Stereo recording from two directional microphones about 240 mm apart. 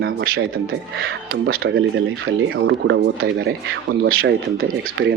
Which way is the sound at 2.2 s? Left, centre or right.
Right.